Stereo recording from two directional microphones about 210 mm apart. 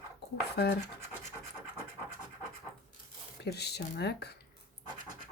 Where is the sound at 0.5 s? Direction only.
50° left (ahead or behind).